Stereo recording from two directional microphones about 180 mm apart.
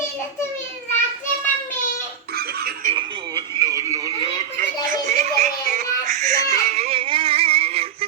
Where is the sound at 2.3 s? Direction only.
60° right (ahead or behind).